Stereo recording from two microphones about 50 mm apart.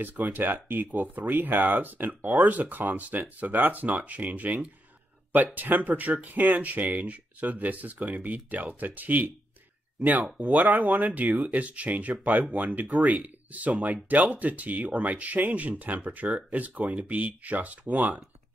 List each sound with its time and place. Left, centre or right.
0.0 s speech: right
10.4 s speech: right